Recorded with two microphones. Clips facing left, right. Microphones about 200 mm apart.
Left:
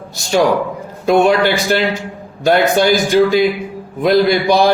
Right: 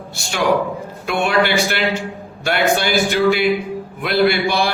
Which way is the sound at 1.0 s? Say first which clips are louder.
Left 6 dB; 40° left (ahead or behind).